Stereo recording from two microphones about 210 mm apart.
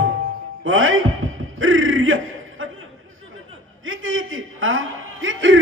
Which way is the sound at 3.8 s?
70° right (ahead or behind).